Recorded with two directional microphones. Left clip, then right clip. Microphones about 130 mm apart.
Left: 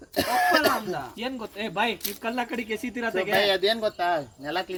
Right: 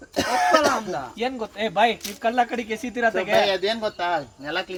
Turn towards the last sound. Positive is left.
turn(degrees=-5)  # may be behind; listen again after turning